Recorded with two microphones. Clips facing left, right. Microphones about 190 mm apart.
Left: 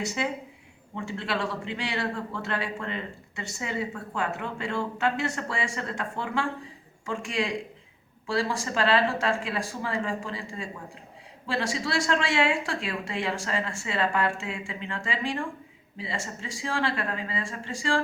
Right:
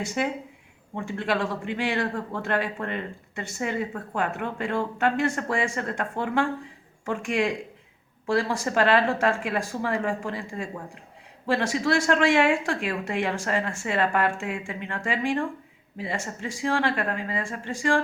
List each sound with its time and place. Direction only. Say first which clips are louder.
0.0 s speech: right 2 dB; 50° right (ahead or behind)